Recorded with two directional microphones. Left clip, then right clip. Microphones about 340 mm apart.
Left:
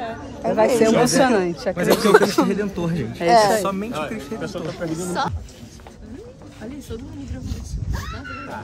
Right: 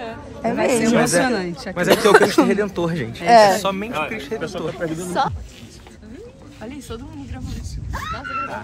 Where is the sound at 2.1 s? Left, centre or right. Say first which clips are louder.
Right 1 dB; right.